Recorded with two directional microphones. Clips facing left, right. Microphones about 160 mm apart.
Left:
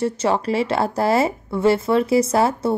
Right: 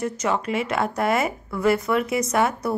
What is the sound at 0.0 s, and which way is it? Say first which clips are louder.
Speech: left 4 dB; 30° left (ahead or behind).